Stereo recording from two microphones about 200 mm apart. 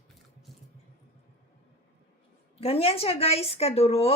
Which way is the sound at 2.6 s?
30° left (ahead or behind).